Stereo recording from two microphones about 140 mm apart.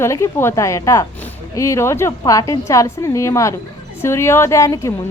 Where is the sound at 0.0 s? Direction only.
20° left (ahead or behind).